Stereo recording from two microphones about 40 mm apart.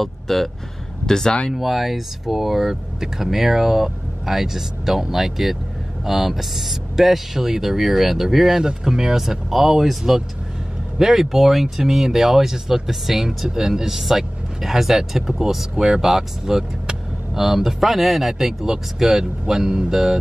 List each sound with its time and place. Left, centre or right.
0.0 s speech: centre
1.0 s speech: centre
1.5 s speech: centre